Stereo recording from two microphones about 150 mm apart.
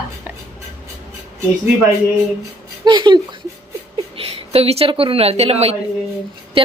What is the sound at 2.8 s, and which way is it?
A woman's voice, 30° right (ahead or behind).